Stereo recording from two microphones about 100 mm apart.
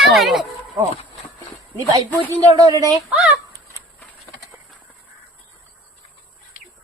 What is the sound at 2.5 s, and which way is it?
Speech, 40° right (ahead or behind).